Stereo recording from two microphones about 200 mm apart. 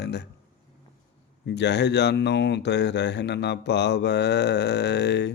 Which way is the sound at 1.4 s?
60° left (ahead or behind).